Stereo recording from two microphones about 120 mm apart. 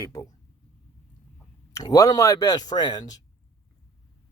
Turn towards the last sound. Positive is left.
turn(degrees=35)  # may be behind; listen again after turning